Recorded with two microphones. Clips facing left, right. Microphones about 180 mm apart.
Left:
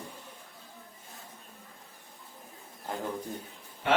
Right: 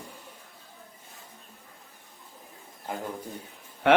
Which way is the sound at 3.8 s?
65° right (ahead or behind).